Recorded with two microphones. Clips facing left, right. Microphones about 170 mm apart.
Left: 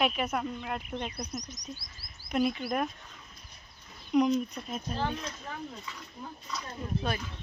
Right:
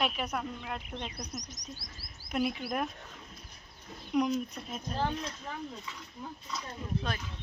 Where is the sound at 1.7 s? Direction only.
75° right (ahead or behind).